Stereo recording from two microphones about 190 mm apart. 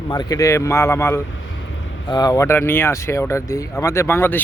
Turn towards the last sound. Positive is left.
turn(degrees=10)  # may be behind; listen again after turning